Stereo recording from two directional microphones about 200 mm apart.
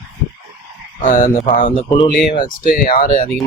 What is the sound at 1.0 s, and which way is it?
A man's voice, 40° left (ahead or behind).